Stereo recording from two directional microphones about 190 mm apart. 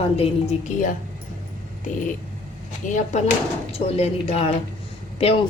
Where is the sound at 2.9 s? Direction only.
40° left (ahead or behind).